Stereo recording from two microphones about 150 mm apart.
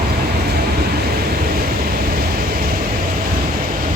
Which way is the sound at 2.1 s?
75° right (ahead or behind).